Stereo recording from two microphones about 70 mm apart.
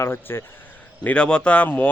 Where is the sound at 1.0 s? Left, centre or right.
Centre.